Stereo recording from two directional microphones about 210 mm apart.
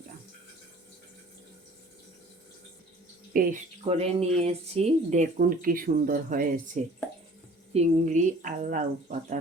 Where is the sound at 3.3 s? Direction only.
35° right (ahead or behind).